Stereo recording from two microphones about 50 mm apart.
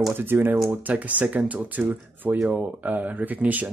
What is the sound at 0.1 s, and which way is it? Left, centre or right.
Speech, right.